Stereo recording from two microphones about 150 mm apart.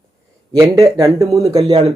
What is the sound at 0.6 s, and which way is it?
Speech, 20° right (ahead or behind).